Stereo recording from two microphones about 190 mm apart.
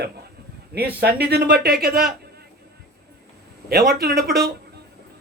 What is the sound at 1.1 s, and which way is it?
Speech, 60° right (ahead or behind).